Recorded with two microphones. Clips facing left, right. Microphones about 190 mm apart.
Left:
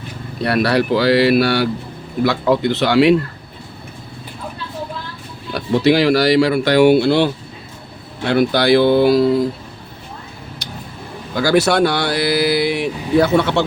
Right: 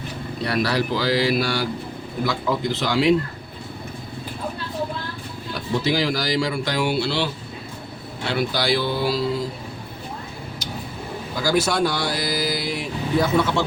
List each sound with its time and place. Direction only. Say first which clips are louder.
0.4 s speech: left 7 dB; 65° left (ahead or behind)
5.5 s speech: left 8 dB; 70° left (ahead or behind); by 7.3 s 55° left (ahead or behind)
8.3 s speech: left 9 dB; 55° left (ahead or behind)
11.3 s speech: left 7 dB; 70° left (ahead or behind)